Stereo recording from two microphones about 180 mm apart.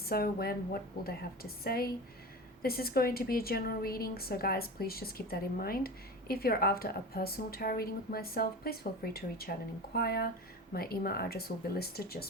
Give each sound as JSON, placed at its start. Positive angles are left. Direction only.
{"t": 0.0, "sound": "a woman's voice", "side_deg": 55}